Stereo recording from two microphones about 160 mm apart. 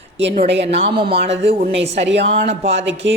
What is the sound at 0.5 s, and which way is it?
Speech, 40° right (ahead or behind).